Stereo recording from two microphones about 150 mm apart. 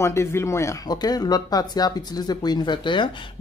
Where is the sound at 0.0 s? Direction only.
15° left (ahead or behind).